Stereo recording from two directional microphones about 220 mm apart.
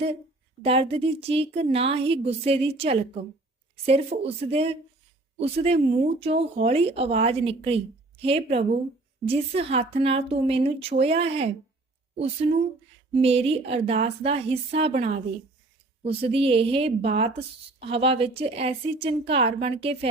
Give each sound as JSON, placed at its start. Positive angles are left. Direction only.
{"t": 0.6, "sound": "speech", "side_deg": -25}